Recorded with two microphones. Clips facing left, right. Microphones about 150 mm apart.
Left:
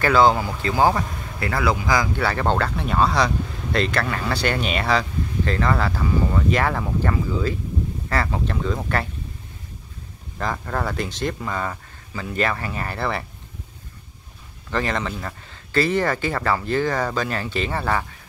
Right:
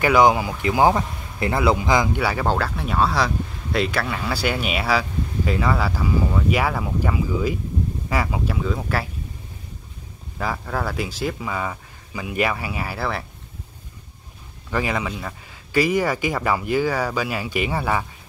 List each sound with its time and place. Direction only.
0.0 s speech: 15° right (ahead or behind)
2.2 s speech: 5° right (ahead or behind)
10.4 s speech: 5° right (ahead or behind)
14.7 s speech: 10° right (ahead or behind)